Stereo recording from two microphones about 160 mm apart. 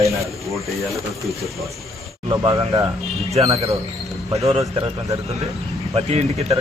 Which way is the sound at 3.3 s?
35° right (ahead or behind).